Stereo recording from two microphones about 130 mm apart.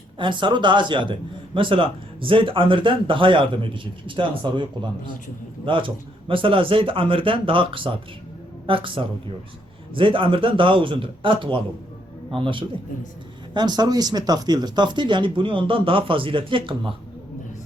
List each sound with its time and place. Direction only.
0.2 s speech: 40° right (ahead or behind)